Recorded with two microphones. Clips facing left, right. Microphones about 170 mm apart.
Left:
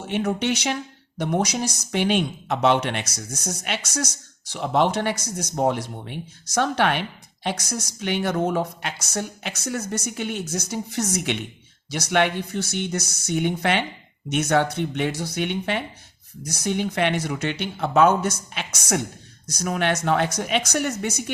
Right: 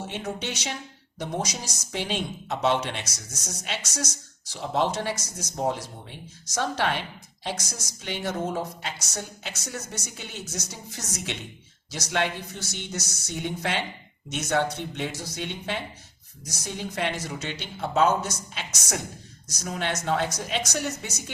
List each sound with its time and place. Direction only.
0.1 s speech: 65° left (ahead or behind)